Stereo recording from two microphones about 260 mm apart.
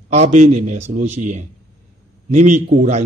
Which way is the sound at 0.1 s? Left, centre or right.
Right.